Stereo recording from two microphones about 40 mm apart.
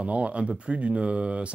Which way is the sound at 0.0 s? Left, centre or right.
Right.